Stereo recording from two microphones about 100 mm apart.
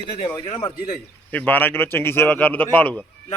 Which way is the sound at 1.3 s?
15° left (ahead or behind).